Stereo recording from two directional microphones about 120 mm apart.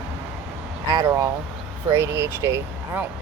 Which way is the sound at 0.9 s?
30° right (ahead or behind).